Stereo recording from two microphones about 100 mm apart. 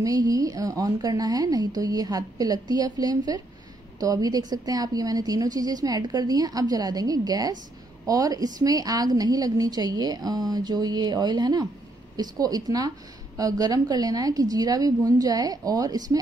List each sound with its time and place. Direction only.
0.0 s a woman's voice: 35° right (ahead or behind)